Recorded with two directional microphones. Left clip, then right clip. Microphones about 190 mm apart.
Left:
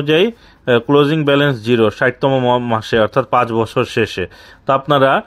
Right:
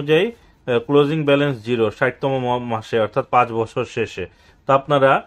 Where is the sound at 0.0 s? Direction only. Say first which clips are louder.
Left 3 dB; 40° left (ahead or behind).